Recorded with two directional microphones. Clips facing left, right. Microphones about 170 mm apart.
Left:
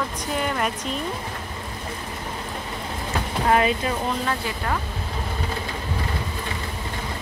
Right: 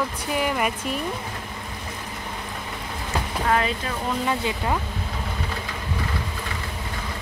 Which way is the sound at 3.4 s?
20° left (ahead or behind).